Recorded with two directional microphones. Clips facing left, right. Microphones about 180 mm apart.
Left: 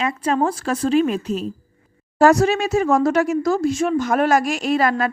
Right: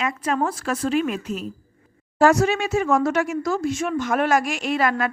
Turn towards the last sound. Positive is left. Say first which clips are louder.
# left 3 dB
turn(degrees=35)  # may be behind; listen again after turning